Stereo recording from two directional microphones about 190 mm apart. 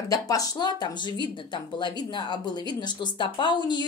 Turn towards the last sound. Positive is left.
turn(degrees=25)  # may be behind; listen again after turning